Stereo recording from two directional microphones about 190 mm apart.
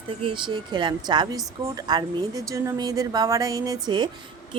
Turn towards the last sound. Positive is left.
turn(degrees=-20)  # may be behind; listen again after turning